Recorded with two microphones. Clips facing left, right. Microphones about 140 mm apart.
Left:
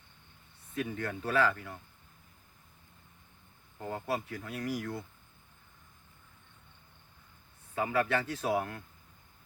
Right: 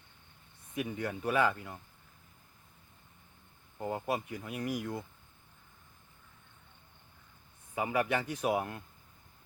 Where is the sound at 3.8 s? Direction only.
15° right (ahead or behind).